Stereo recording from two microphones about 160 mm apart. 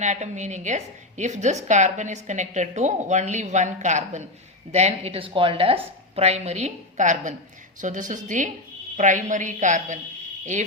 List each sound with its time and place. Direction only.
0.0 s a woman's voice: 45° right (ahead or behind)